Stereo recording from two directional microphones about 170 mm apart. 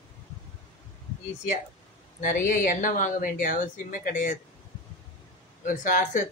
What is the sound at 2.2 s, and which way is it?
Speech, 50° left (ahead or behind).